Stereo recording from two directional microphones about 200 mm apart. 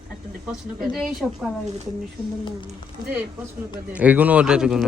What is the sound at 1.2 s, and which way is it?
Speech, centre (ahead or behind).